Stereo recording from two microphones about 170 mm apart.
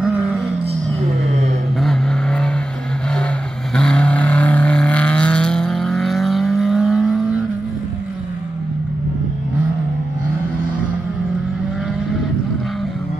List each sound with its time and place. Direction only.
0.0 s vehicle: 5° right (ahead or behind)
1.2 s a sound: 40° right (ahead or behind)
1.8 s vehicle: 5° left (ahead or behind)
3.7 s vehicle: 5° left (ahead or behind)